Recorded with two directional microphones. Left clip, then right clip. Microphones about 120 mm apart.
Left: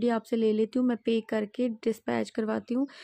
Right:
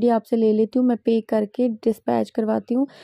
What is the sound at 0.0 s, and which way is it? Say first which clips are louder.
A woman's voice: right 8 dB; 30° right (ahead or behind).